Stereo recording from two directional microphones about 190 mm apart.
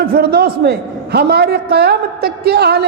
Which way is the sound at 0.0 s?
50° right (ahead or behind).